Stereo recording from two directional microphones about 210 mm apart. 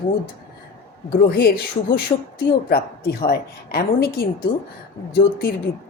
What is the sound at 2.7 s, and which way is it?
A woman's voice, 50° left (ahead or behind).